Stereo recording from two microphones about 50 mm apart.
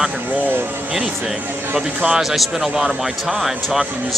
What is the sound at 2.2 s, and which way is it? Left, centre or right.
A man's voice, centre.